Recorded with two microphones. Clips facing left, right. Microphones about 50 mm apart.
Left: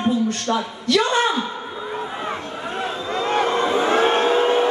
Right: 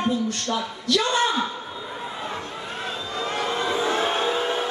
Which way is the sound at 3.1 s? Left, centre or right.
Left.